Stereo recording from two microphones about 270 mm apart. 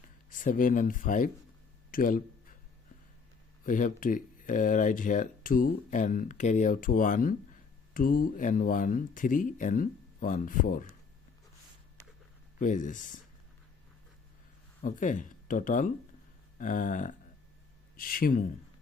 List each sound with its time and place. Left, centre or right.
0.3 s speech: left
1.9 s a sound: left
3.7 s speech: left
12.5 s speech: left
14.8 s speech: left